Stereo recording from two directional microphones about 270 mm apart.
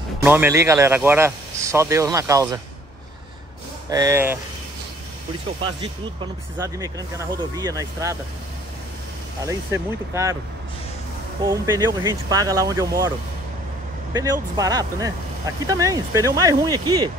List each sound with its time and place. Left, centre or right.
0.2 s speech: centre
3.9 s speech: centre
6.6 s speech: centre
9.4 s speech: centre
11.4 s speech: centre
14.1 s speech: centre